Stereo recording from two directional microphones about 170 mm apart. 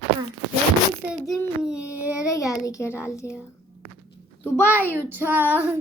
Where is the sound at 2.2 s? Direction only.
20° left (ahead or behind).